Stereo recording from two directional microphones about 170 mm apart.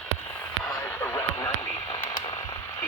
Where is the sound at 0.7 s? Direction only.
15° left (ahead or behind).